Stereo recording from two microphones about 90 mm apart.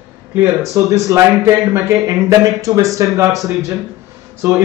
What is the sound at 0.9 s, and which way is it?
A man's voice, 35° right (ahead or behind).